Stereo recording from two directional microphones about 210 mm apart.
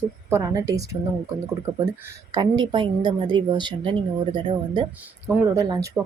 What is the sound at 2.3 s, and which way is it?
Speech, 20° right (ahead or behind).